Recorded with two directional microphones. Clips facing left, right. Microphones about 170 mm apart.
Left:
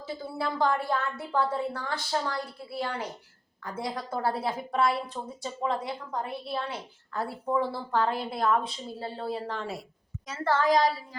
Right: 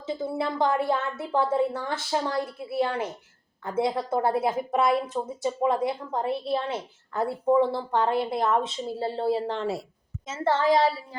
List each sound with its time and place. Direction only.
0.0 s a woman's voice: 20° right (ahead or behind)